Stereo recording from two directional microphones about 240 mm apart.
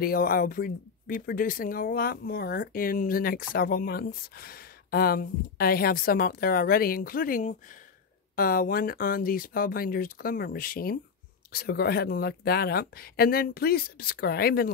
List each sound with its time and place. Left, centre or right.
0.0 s speech: left